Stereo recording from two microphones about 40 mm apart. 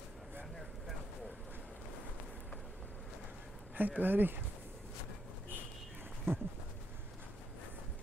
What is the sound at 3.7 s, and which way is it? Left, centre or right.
Speech, right.